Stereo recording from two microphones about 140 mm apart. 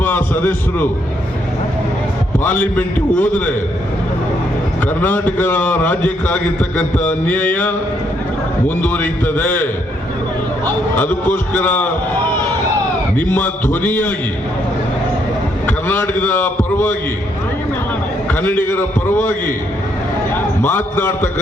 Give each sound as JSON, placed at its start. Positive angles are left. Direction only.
{"t": 0.0, "sound": "a sound", "side_deg": 15}
{"t": 2.4, "sound": "a man's voice", "side_deg": 15}
{"t": 4.9, "sound": "a man's voice", "side_deg": 15}
{"t": 10.9, "sound": "a man's voice", "side_deg": 15}
{"t": 13.3, "sound": "a man's voice", "side_deg": 15}
{"t": 15.6, "sound": "a man's voice", "side_deg": 15}
{"t": 18.3, "sound": "a man's voice", "side_deg": 15}